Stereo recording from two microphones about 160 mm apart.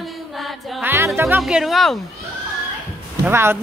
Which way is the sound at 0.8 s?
15° right (ahead or behind).